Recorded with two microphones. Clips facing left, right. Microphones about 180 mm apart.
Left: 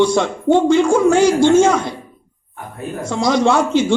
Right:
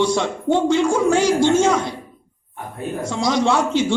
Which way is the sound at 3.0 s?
55° left (ahead or behind).